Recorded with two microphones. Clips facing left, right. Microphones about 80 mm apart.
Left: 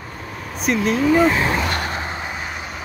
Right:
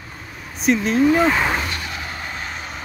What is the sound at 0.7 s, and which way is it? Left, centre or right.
Speech, centre.